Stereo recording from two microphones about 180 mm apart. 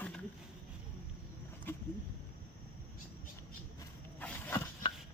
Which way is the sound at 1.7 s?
10° left (ahead or behind).